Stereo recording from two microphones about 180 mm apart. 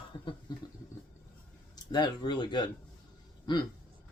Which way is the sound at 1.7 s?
25° left (ahead or behind).